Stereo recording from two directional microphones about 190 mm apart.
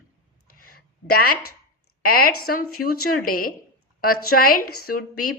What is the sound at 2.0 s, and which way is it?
A woman's voice, 50° left (ahead or behind).